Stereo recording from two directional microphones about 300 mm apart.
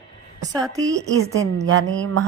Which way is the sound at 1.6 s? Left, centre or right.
Right.